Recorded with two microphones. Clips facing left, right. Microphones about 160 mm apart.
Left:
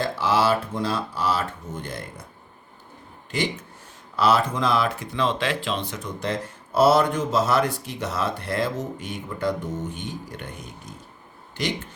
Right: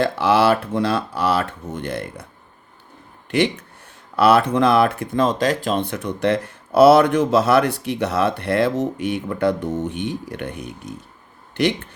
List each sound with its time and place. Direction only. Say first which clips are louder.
0.0 s speech: right 5 dB; 65° right (ahead or behind)
3.3 s speech: right 8 dB; 65° right (ahead or behind)